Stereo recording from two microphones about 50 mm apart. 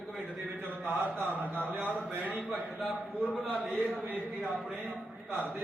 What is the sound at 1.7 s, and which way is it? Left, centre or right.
Speech, right.